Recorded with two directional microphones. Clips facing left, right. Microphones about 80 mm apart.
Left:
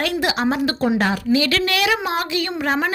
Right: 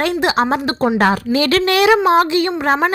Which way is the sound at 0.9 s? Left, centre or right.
Right.